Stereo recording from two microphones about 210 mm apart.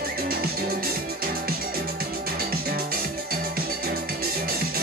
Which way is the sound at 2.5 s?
45° right (ahead or behind).